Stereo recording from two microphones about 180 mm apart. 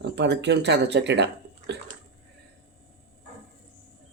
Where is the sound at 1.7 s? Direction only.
75° right (ahead or behind).